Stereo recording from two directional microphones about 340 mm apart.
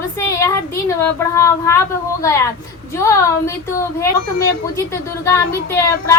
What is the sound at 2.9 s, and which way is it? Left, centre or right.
Speech, centre.